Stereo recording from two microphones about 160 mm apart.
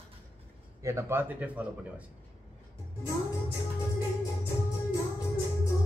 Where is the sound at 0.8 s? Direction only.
20° right (ahead or behind).